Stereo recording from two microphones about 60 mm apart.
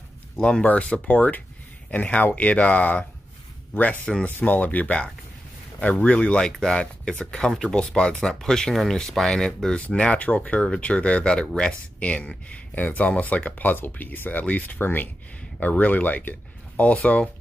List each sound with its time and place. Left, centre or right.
0.4 s speech: centre
6.5 s speech: centre